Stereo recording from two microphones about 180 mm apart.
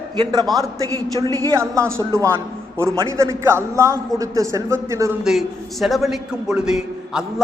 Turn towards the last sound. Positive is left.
turn(degrees=-5)  # may be behind; listen again after turning